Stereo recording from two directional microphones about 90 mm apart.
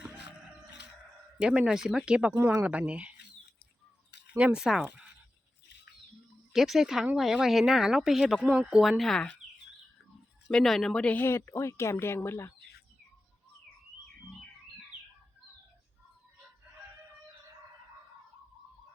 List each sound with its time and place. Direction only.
1.4 s speech: 10° right (ahead or behind)
4.4 s speech: 10° right (ahead or behind)
6.5 s speech: 5° right (ahead or behind)
10.5 s speech: 5° left (ahead or behind)
11.2 s speech: 30° left (ahead or behind)